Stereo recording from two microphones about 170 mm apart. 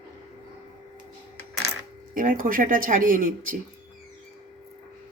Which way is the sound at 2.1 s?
55° right (ahead or behind).